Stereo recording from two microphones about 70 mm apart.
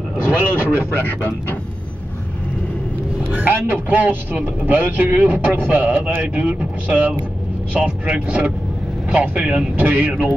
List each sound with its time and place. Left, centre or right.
0.5 s speech: right
3.3 s a man's voice: right
9.8 s a man's voice: right